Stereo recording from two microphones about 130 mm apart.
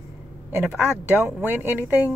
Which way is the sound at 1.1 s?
15° right (ahead or behind).